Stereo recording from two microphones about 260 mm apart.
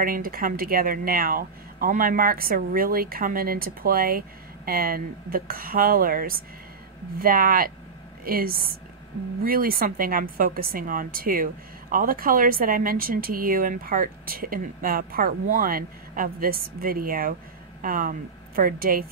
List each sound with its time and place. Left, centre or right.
0.0 s a woman's voice: right